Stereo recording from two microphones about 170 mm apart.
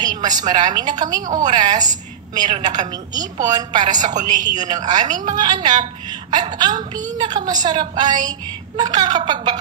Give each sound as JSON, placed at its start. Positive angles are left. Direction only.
{"t": 0.0, "sound": "a woman's voice", "side_deg": -25}
{"t": 3.8, "sound": "a woman's voice", "side_deg": -45}
{"t": 4.6, "sound": "a woman's voice", "side_deg": -25}